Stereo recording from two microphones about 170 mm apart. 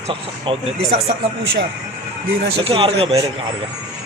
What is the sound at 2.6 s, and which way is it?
Speech, 30° right (ahead or behind).